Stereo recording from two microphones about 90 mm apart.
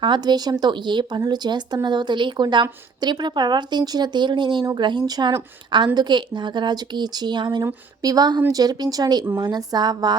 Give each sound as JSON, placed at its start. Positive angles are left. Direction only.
{"t": 0.0, "sound": "a woman's voice", "side_deg": -55}